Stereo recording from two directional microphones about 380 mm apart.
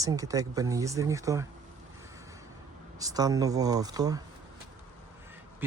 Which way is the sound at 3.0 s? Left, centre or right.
Centre.